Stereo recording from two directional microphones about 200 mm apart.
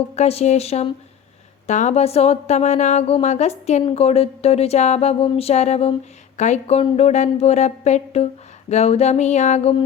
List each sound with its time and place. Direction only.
0.2 s a woman's voice: 30° left (ahead or behind)